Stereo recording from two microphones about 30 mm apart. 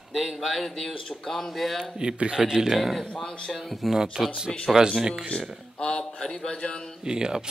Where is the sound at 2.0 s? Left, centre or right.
Right.